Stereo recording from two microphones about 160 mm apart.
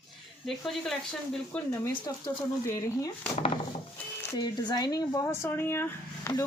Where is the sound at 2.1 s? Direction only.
20° left (ahead or behind).